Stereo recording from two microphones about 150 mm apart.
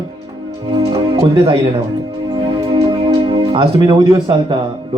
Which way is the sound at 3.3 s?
35° right (ahead or behind).